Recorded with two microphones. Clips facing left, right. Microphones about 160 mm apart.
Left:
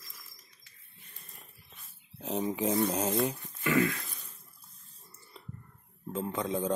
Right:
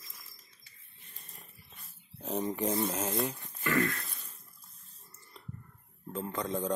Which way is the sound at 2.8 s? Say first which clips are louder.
Left 4 dB; 25° left (ahead or behind).